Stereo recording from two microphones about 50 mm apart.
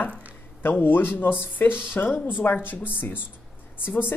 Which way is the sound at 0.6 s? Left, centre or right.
Left.